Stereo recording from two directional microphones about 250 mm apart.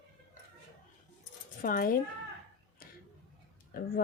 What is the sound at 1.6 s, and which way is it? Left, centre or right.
Speech, left.